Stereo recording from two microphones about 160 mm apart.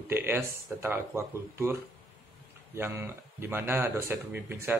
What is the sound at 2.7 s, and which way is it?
A man's voice, 15° right (ahead or behind).